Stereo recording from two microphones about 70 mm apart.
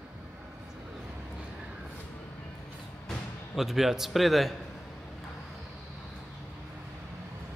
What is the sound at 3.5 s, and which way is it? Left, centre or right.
Speech, centre.